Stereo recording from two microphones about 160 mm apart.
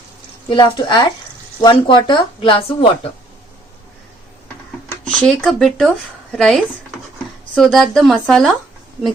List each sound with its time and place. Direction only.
0.4 s a woman's voice: 30° left (ahead or behind)
5.0 s speech: 5° left (ahead or behind)